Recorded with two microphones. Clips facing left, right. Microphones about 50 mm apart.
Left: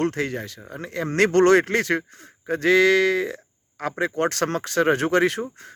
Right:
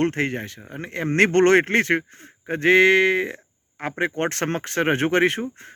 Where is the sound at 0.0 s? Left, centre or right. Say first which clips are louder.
Right 2 dB; right.